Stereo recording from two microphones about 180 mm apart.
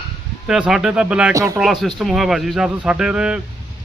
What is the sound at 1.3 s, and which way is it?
Speech, 15° right (ahead or behind).